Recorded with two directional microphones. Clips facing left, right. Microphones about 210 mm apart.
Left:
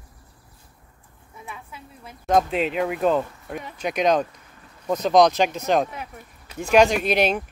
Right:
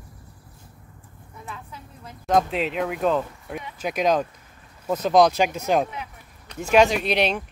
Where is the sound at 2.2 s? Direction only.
Centre (ahead or behind).